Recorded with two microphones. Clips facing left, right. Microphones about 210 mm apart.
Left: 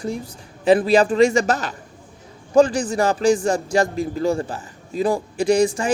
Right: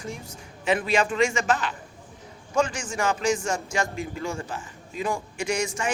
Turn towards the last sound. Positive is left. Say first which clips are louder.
# left 10 dB
turn(degrees=35)  # may be behind; listen again after turning